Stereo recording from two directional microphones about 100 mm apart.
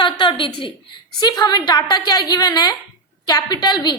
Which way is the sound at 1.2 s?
40° left (ahead or behind).